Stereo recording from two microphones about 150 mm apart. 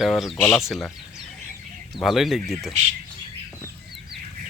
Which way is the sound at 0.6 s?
Centre (ahead or behind).